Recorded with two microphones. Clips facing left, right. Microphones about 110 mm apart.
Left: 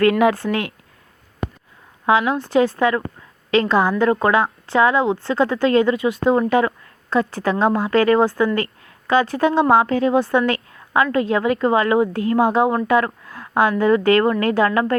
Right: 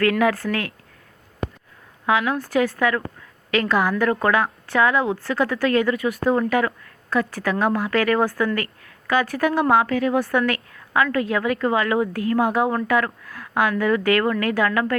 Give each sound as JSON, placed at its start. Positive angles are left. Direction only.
{"t": 0.0, "sound": "a woman's voice", "side_deg": 20}
{"t": 2.0, "sound": "a woman's voice", "side_deg": 30}